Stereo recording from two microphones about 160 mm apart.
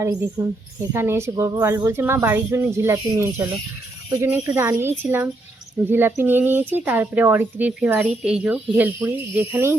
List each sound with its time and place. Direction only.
0.0 s a woman's voice: 20° right (ahead or behind)